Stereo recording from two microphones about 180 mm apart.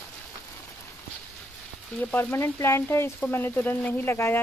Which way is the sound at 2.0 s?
10° left (ahead or behind).